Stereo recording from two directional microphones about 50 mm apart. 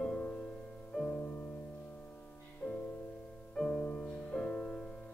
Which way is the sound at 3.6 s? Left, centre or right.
Centre.